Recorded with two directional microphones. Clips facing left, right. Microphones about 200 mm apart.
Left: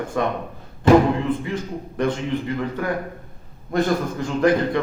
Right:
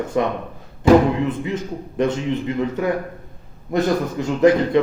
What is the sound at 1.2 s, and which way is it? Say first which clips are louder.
A man's voice: even; 20° right (ahead or behind).